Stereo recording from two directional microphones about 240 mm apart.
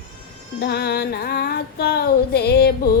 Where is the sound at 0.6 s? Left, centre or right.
Left.